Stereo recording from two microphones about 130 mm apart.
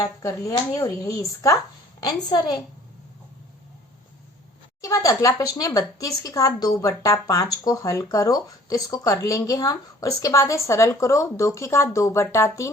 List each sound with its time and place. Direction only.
0.0 s speech: 25° left (ahead or behind)
4.8 s speech: 25° left (ahead or behind)